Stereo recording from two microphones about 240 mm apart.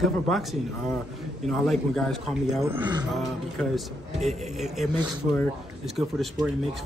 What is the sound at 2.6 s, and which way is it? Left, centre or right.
Speech, centre.